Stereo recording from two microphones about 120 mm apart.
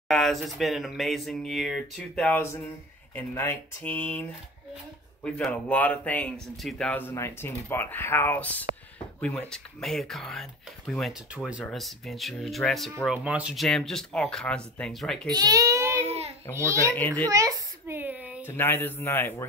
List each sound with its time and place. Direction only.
0.1 s speech: centre (ahead or behind)
2.1 s speech: 15° left (ahead or behind)
6.5 s speech: centre (ahead or behind)
6.9 s speech: 20° left (ahead or behind); by 13.7 s 10° right (ahead or behind)
13.7 s speech: 5° left (ahead or behind)
15.3 s a sound: 30° right (ahead or behind)
16.1 s babbling: 55° right (ahead or behind)
16.5 s a child's voice: 25° right (ahead or behind)
16.9 s speech: 15° left (ahead or behind)
17.3 s a sound: 25° right (ahead or behind)
18.5 s a man's voice: 20° left (ahead or behind)